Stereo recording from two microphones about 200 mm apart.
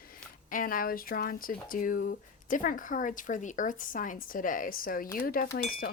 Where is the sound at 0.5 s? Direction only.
45° left (ahead or behind).